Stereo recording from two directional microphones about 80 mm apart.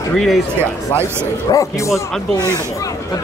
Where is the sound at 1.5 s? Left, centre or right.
Left.